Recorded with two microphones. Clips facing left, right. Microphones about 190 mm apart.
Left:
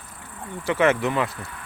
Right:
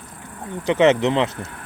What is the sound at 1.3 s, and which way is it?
Speech, 45° right (ahead or behind).